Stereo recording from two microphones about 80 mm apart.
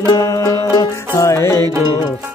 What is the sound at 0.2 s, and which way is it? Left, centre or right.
Music, left.